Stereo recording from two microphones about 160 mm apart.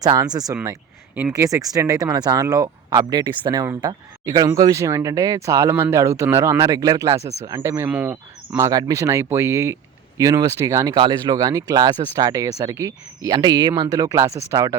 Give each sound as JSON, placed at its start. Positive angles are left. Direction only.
{"t": 0.0, "sound": "speech", "side_deg": -25}